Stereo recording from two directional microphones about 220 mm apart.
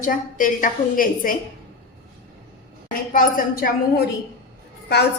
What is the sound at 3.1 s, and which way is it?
A woman's voice, 40° left (ahead or behind).